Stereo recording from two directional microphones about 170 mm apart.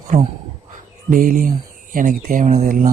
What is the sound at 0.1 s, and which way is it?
Speech, 50° right (ahead or behind).